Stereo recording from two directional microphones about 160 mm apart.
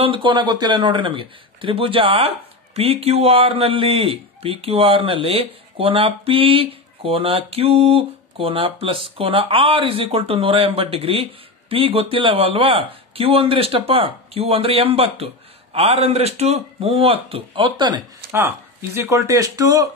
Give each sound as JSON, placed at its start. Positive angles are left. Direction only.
{"t": 0.0, "sound": "speech", "side_deg": -30}
{"t": 18.3, "sound": "speech", "side_deg": -15}